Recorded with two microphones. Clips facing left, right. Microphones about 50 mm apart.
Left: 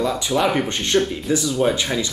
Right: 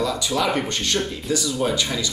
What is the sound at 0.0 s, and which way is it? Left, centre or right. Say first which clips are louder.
Speech: left 2 dB; left.